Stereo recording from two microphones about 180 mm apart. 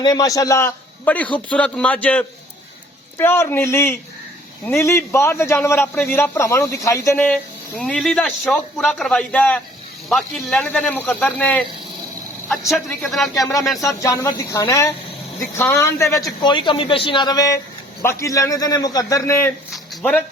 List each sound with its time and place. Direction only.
0.0 s a man's voice: 20° left (ahead or behind)
7.8 s a man's voice: 5° left (ahead or behind)
14.0 s a man's voice: 20° left (ahead or behind)
16.4 s a man's voice: 25° left (ahead or behind)
19.7 s a sound: 5° left (ahead or behind)